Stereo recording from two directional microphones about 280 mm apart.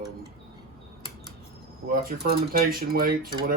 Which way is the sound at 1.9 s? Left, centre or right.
Right.